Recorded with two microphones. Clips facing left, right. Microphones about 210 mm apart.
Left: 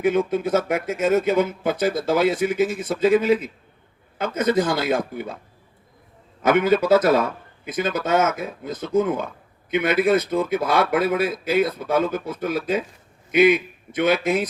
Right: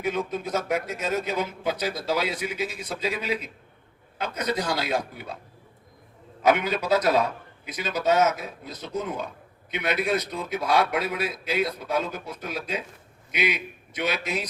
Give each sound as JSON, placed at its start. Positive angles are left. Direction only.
{"t": 0.0, "sound": "a man's voice", "side_deg": 50}
{"t": 6.4, "sound": "a man's voice", "side_deg": 50}